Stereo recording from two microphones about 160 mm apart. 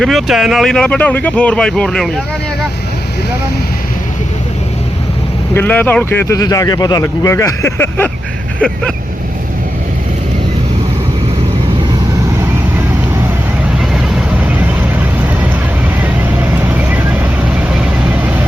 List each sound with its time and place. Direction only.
0.0 s speech: centre (ahead or behind)
5.5 s speech: 10° left (ahead or behind)
13.7 s vehicle: 5° right (ahead or behind)
16.4 s vehicle: 10° right (ahead or behind)